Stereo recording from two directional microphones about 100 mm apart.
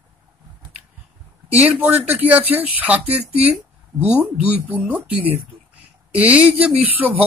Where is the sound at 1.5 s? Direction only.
15° right (ahead or behind).